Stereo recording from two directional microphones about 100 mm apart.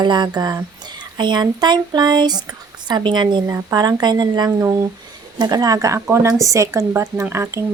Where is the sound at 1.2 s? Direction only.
50° right (ahead or behind); by 6.8 s 30° right (ahead or behind).